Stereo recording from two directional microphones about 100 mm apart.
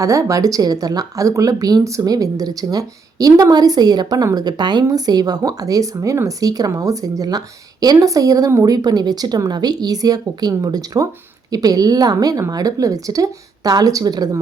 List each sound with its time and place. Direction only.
0.0 s speech: 35° right (ahead or behind)